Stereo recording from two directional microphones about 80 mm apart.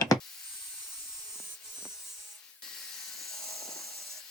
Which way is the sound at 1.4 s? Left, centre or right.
Centre.